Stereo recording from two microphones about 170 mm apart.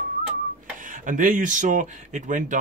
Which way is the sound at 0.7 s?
50° right (ahead or behind).